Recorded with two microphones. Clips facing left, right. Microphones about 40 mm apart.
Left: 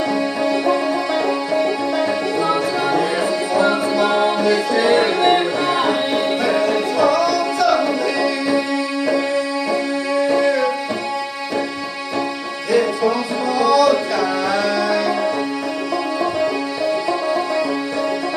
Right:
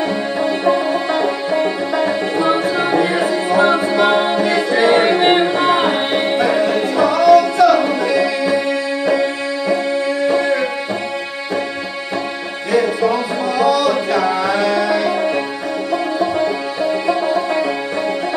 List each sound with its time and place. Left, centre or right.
0.5 s music: right
13.6 s music: right